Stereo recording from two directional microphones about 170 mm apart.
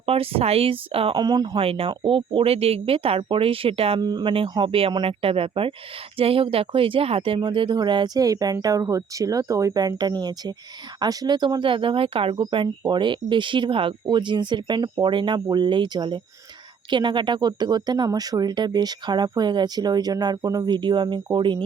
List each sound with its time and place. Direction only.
0.0 s speech: 35° right (ahead or behind)